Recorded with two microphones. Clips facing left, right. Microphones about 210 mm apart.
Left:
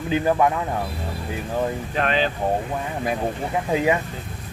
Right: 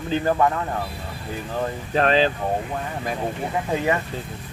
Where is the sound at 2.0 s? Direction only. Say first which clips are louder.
Right 4 dB; 35° right (ahead or behind).